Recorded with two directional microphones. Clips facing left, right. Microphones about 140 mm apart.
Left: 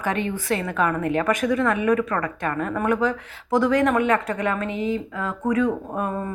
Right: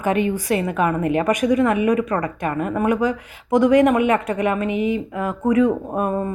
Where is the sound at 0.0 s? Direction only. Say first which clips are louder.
Right 5 dB; 15° right (ahead or behind).